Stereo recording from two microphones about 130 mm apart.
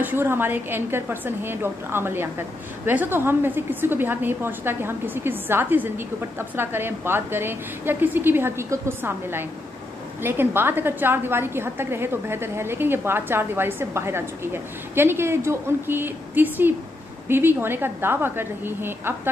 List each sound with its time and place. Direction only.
0.0 s a woman's voice: 15° right (ahead or behind)